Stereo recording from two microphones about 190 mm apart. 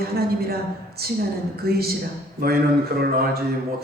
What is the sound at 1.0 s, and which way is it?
Speech, 55° right (ahead or behind).